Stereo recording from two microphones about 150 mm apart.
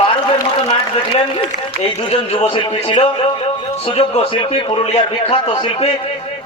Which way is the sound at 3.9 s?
45° left (ahead or behind).